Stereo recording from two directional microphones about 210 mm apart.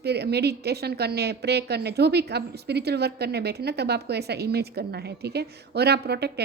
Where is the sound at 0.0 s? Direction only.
50° right (ahead or behind).